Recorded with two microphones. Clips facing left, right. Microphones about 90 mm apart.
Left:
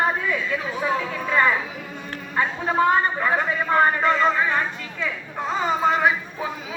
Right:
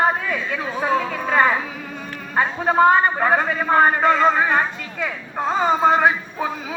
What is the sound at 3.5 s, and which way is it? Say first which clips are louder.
Male singing: right 2 dB; 25° right (ahead or behind).